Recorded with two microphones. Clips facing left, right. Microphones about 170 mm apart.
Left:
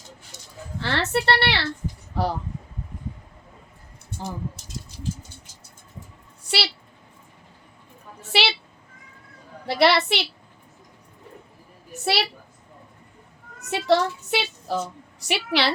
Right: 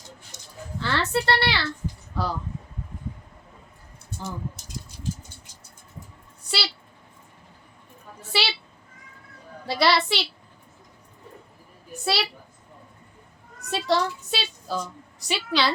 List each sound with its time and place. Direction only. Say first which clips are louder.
0.8 s a woman's voice: left 1 dB; 65° left (ahead or behind)
8.3 s a sound: left 3 dB; 70° left (ahead or behind)
9.6 s a woman's voice: left 3 dB; 60° left (ahead or behind)
12.0 s a woman's voice: left 2 dB; 60° left (ahead or behind)
13.7 s a child's voice: left 3 dB; 65° left (ahead or behind)